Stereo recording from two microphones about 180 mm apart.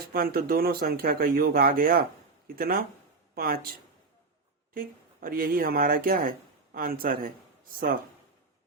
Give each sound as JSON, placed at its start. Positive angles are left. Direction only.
{"t": 0.1, "sound": "speech", "side_deg": -55}
{"t": 4.7, "sound": "speech", "side_deg": -50}